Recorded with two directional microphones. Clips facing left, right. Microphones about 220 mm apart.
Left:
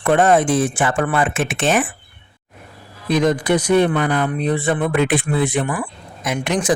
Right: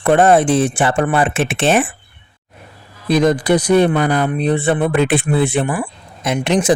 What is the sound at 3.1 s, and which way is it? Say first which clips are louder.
Speech: right 3 dB; 35° right (ahead or behind).